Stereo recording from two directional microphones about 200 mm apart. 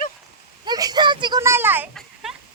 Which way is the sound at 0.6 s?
20° right (ahead or behind).